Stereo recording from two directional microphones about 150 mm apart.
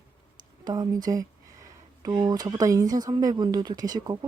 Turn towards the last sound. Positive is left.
turn(degrees=-25)  # may be behind; listen again after turning